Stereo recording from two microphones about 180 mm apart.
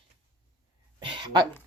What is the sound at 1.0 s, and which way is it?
Speech, 25° right (ahead or behind).